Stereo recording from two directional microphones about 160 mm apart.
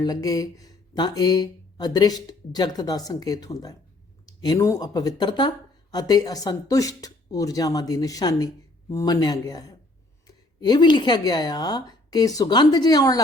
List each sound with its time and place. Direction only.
0.0 s speech: 25° left (ahead or behind)